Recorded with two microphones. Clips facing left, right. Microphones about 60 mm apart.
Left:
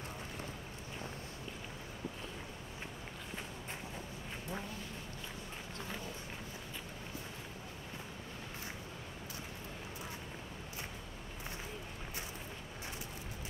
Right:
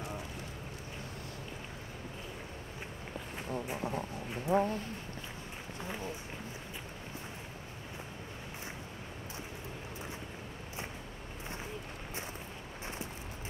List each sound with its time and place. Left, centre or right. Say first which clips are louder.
4.5 s speech: right 16 dB; right